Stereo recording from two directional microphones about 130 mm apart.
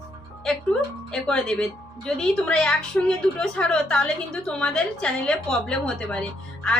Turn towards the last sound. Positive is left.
turn(degrees=10)  # may be behind; listen again after turning